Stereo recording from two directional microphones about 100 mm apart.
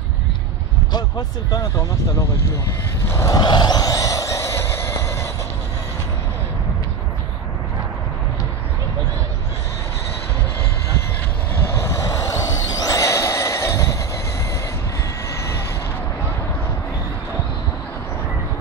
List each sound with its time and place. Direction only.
0.9 s speech: 45° left (ahead or behind)
3.1 s vehicle: 30° left (ahead or behind)
3.3 s a sound: 45° left (ahead or behind); by 5.3 s 25° left (ahead or behind)
11.6 s vehicle: 30° left (ahead or behind)